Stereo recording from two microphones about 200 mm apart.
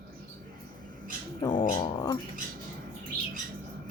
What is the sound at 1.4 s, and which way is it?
Speech, 20° left (ahead or behind).